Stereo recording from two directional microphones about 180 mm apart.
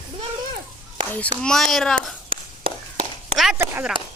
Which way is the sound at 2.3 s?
30° right (ahead or behind).